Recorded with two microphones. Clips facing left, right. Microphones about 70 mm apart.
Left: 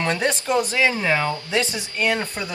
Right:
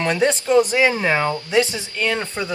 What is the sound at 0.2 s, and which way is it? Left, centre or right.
Speech, centre.